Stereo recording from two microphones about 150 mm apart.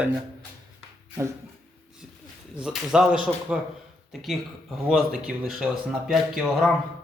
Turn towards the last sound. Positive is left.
turn(degrees=0)  # may be behind; listen again after turning